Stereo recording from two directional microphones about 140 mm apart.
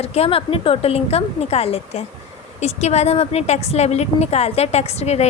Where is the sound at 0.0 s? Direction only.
45° left (ahead or behind).